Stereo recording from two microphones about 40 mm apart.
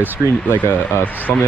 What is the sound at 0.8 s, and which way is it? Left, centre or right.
Speech, left.